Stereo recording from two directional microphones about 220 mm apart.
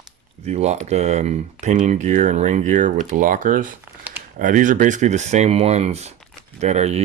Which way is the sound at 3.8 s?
10° right (ahead or behind).